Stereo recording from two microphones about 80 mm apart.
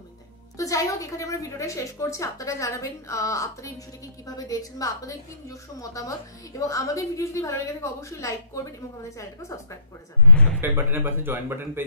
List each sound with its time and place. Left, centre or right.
0.6 s a woman's voice: left
10.3 s speech: centre
10.6 s speech: right